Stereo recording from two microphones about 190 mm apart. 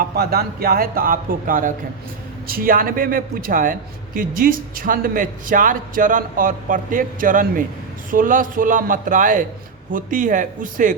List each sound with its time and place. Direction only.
0.0 s a man's voice: 55° right (ahead or behind)